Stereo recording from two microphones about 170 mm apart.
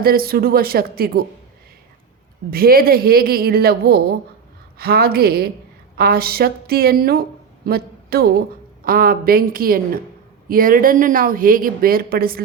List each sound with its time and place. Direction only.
0.0 s a woman's voice: 60° right (ahead or behind)
2.5 s a woman's voice: 60° right (ahead or behind)